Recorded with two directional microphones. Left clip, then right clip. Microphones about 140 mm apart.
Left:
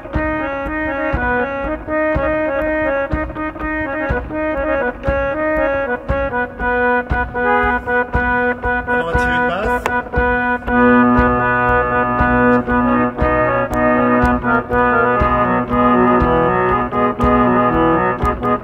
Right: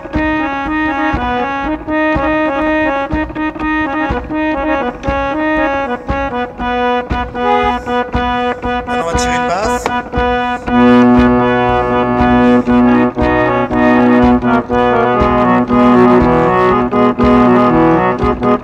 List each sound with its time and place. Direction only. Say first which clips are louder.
2.0 s music: right 3 dB; 25° right (ahead or behind)
7.4 s organ: right 3 dB; 30° right (ahead or behind)
10.7 s music: right 3 dB; 30° right (ahead or behind)